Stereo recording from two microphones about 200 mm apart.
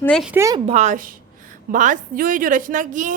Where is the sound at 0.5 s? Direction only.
30° right (ahead or behind).